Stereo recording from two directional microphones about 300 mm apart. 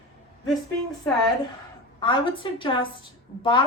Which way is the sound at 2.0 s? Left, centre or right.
Centre.